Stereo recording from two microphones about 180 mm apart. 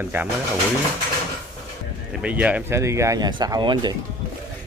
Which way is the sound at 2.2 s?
10° right (ahead or behind).